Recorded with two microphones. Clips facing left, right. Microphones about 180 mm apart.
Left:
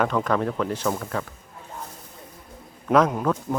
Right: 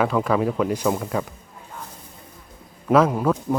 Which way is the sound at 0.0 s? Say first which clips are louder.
Right 2 dB; 5° right (ahead or behind).